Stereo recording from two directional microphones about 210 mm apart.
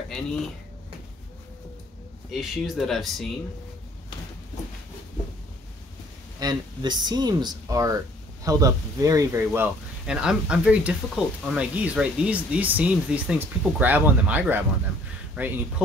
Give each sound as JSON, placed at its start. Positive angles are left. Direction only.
{"t": 2.3, "sound": "speech", "side_deg": 0}
{"t": 6.4, "sound": "speech", "side_deg": -20}